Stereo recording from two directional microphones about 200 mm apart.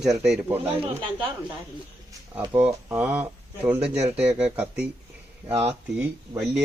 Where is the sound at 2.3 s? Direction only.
10° right (ahead or behind).